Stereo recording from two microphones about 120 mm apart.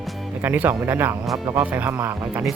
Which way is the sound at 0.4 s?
15° right (ahead or behind).